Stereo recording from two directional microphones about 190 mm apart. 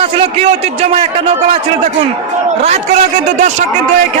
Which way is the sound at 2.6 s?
35° right (ahead or behind).